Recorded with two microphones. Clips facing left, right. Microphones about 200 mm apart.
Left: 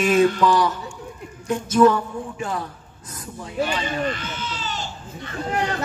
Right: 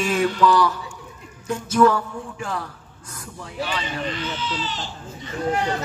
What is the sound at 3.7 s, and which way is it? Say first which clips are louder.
Speech: left 3 dB; 50° left (ahead or behind).